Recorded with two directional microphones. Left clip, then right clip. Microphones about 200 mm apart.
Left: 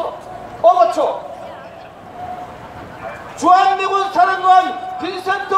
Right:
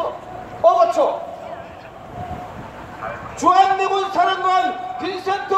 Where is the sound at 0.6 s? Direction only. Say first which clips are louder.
Left 3 dB; 10° right (ahead or behind).